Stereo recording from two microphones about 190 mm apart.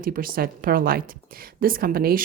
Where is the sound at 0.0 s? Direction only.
50° right (ahead or behind).